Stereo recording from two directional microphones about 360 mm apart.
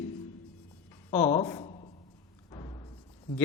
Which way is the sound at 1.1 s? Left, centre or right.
Centre.